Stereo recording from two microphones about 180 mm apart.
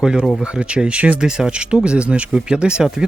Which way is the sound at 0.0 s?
5° right (ahead or behind).